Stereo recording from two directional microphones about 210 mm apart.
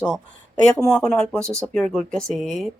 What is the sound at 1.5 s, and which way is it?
Speech, 15° right (ahead or behind).